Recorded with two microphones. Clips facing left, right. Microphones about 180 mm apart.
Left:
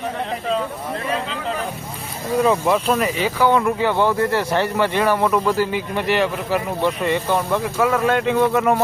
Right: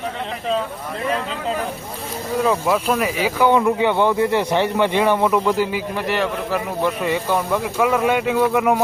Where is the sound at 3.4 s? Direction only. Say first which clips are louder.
Right 2 dB; 15° right (ahead or behind).